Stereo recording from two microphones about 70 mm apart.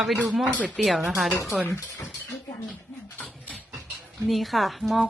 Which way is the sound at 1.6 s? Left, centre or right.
Left.